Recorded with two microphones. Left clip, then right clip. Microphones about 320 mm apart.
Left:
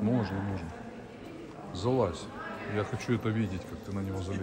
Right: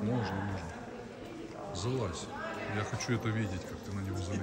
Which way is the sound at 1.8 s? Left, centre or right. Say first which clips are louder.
Left 8 dB; centre.